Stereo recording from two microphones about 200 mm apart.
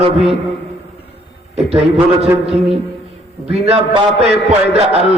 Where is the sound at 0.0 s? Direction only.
30° right (ahead or behind).